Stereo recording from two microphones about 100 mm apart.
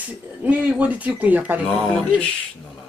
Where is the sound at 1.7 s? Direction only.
10° left (ahead or behind).